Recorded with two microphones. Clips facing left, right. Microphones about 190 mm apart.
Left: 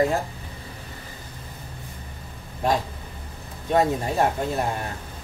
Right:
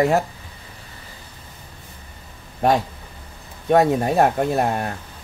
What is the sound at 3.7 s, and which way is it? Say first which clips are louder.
Speech: right 5 dB; 60° right (ahead or behind).